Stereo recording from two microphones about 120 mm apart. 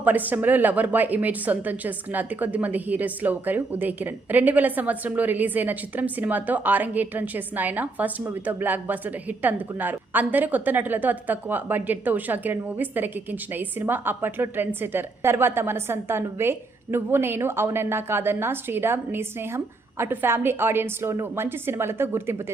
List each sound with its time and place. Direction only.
0.0 s a woman's voice: 15° right (ahead or behind)